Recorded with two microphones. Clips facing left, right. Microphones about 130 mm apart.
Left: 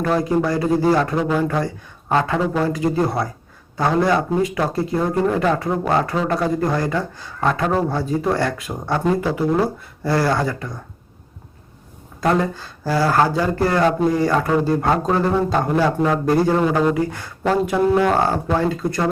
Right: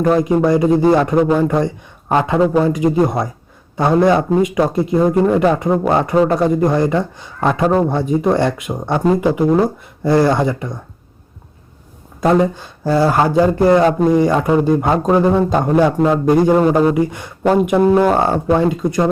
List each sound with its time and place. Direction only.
0.3 s a man's voice: 20° right (ahead or behind)
12.2 s a man's voice: 20° right (ahead or behind)